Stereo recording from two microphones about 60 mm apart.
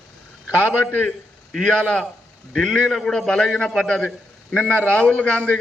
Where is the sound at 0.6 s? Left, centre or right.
Left.